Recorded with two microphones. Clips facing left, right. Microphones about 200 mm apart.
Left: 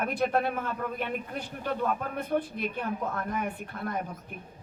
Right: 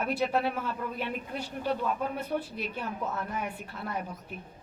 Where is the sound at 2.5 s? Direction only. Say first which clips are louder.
Left 3 dB; 50° left (ahead or behind).